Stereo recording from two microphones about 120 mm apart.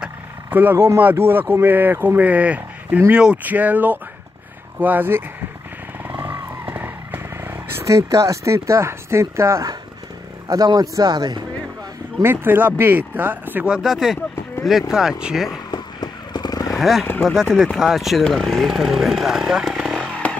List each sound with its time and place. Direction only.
0.0 s speech: 15° right (ahead or behind)
6.2 s vehicle: 15° right (ahead or behind)
10.5 s a man's voice: 30° right (ahead or behind)
12.2 s speech: 15° right (ahead or behind)
15.7 s vehicle: 35° left (ahead or behind)
16.7 s speech: centre (ahead or behind)